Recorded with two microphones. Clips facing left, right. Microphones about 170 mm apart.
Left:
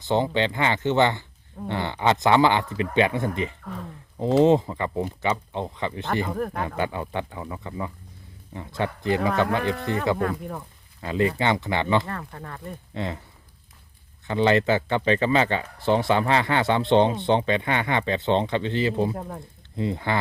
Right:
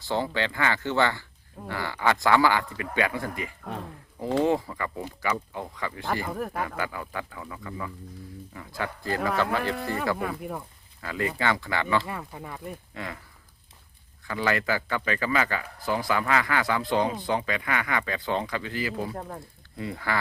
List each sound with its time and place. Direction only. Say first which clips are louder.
0.0 s speech: left 5 dB; 20° left (ahead or behind)
6.3 s speech: left 3 dB; 5° right (ahead or behind)
6.7 s speech: left 5 dB; 25° left (ahead or behind)
9.7 s speech: left 4 dB; 5° right (ahead or behind)
11.0 s speech: left 5 dB; 20° left (ahead or behind)
12.0 s speech: left 1 dB; 10° right (ahead or behind)
12.9 s speech: left 10 dB; 25° left (ahead or behind)
14.3 s speech: left 7 dB; 25° left (ahead or behind)
19.1 s speech: left 2 dB; 5° left (ahead or behind)
19.7 s speech: left 5 dB; 20° left (ahead or behind)